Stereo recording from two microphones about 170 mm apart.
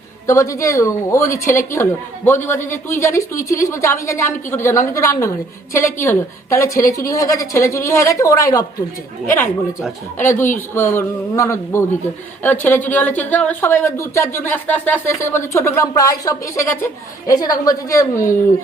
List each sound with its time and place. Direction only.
0.3 s a woman's voice: 20° left (ahead or behind)
10.2 s a woman's voice: 15° left (ahead or behind)